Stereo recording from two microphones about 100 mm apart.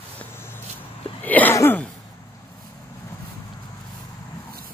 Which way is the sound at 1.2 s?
15° left (ahead or behind).